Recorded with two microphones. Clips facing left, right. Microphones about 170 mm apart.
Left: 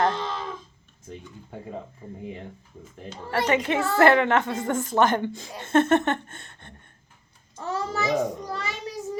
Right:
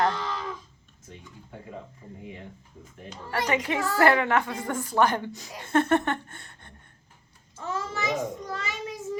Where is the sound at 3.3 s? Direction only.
25° left (ahead or behind).